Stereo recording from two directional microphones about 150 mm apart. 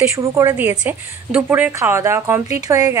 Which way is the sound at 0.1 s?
20° right (ahead or behind).